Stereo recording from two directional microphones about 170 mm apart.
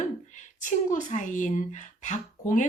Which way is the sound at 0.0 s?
45° left (ahead or behind).